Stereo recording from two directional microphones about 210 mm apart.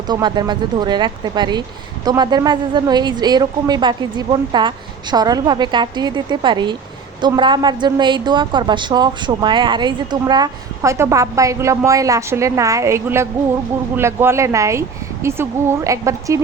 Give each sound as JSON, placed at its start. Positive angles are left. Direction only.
{"t": 0.1, "sound": "a woman's voice", "side_deg": -20}